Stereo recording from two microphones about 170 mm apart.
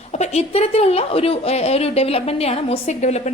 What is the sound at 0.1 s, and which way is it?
A woman's voice, 40° left (ahead or behind).